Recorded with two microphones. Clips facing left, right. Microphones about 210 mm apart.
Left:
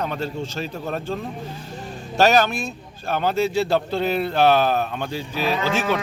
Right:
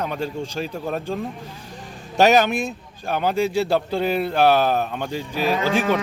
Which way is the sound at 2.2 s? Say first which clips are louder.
Right 1 dB; 15° right (ahead or behind).